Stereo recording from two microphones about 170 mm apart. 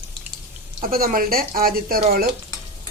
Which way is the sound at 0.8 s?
60° right (ahead or behind).